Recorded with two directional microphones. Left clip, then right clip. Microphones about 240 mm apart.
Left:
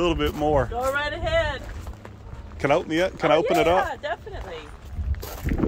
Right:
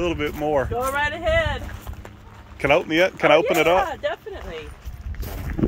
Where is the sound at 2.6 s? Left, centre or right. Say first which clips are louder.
Right 4 dB; centre.